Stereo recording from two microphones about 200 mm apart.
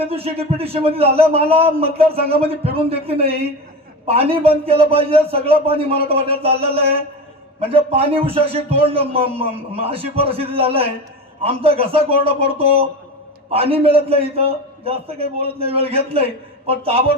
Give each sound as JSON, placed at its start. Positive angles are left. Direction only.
{"t": 0.0, "sound": "a man's voice", "side_deg": -30}